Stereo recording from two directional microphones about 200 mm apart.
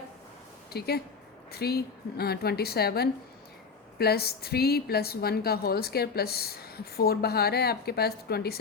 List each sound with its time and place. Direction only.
0.7 s a woman's voice: 50° left (ahead or behind)